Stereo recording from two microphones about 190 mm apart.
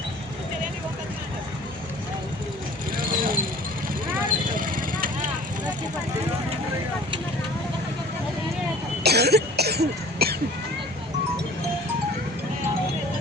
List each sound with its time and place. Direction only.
3.0 s vehicle: 50° right (ahead or behind)
4.7 s vehicle: 45° right (ahead or behind)
9.0 s cough: 60° right (ahead or behind)